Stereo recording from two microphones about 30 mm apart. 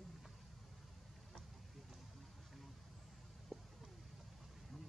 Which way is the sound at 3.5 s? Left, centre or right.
Centre.